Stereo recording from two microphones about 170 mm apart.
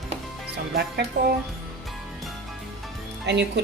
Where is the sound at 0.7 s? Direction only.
65° right (ahead or behind).